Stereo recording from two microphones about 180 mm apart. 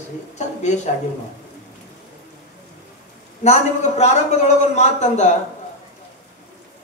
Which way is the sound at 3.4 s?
40° left (ahead or behind).